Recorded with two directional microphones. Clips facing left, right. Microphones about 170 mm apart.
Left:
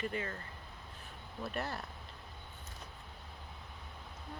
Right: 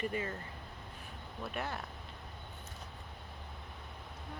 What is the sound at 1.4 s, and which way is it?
Speech, centre (ahead or behind).